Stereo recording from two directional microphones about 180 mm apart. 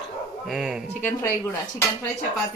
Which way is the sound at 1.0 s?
15° left (ahead or behind).